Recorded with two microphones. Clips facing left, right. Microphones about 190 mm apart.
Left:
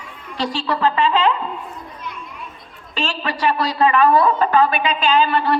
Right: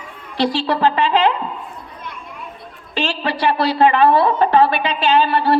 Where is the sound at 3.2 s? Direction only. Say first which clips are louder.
Right 2 dB; 30° right (ahead or behind).